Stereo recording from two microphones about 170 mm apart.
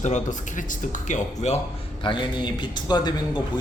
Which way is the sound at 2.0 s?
30° left (ahead or behind).